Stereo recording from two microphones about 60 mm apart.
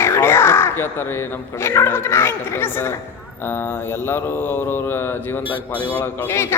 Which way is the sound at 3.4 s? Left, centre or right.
Left.